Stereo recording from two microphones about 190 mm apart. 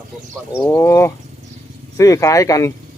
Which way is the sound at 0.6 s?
15° left (ahead or behind).